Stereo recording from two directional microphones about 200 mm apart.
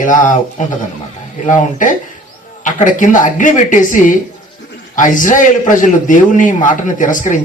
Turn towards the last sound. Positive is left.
turn(degrees=40)  # may be behind; listen again after turning